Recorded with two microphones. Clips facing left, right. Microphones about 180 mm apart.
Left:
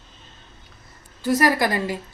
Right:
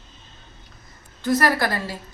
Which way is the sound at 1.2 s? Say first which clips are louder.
Left 1 dB; 15° left (ahead or behind).